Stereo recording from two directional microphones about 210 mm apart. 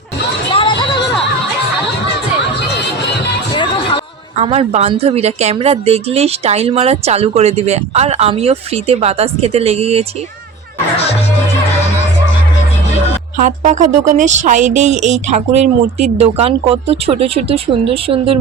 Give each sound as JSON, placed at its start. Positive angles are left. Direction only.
{"t": 0.5, "sound": "a sound", "side_deg": 20}
{"t": 3.5, "sound": "music", "side_deg": 25}
{"t": 4.4, "sound": "speech", "side_deg": -30}
{"t": 13.3, "sound": "speech", "side_deg": -35}